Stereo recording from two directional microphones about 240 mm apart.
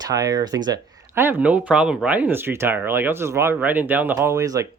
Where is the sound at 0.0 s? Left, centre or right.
Centre.